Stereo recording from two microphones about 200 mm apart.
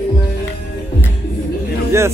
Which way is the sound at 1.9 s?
15° right (ahead or behind).